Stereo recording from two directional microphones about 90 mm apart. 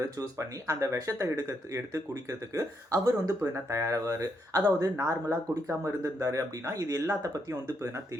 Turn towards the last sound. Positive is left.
turn(degrees=-40)  # may be behind; listen again after turning